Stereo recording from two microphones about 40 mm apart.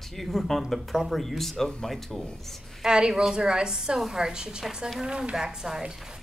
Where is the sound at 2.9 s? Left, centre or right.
Centre.